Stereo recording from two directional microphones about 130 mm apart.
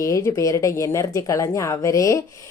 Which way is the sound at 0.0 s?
25° left (ahead or behind).